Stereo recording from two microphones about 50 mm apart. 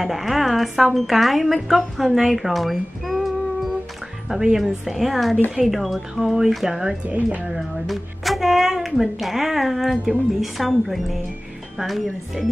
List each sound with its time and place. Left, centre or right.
0.0 s speech: centre